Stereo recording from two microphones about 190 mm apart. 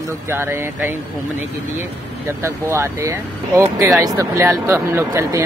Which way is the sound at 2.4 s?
15° right (ahead or behind).